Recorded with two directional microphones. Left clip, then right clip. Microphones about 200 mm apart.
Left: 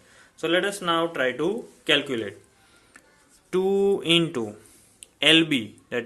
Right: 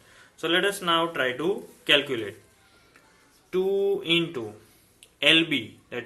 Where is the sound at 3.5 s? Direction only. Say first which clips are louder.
Left 2 dB; 45° left (ahead or behind).